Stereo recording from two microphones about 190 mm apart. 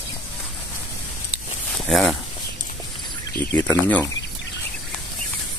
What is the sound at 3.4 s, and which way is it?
Speech, 10° left (ahead or behind).